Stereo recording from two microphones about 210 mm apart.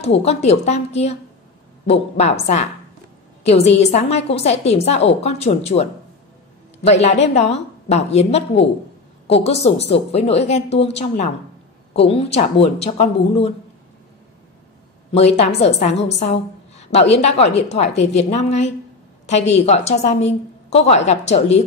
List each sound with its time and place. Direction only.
0.2 s a woman's voice: 30° left (ahead or behind)
2.1 s a woman's voice: 30° left (ahead or behind)
7.0 s a woman's voice: 30° left (ahead or behind)
15.1 s a woman's voice: 30° left (ahead or behind)